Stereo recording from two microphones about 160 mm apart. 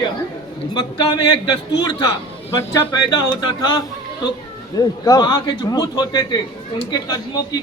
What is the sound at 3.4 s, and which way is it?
A man's voice, 25° left (ahead or behind).